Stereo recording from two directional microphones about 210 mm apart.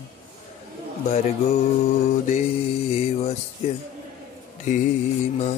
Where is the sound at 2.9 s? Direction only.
30° left (ahead or behind).